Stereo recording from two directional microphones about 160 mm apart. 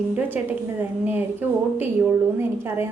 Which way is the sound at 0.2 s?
10° right (ahead or behind).